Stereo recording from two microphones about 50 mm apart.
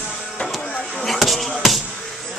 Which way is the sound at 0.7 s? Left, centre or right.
Centre.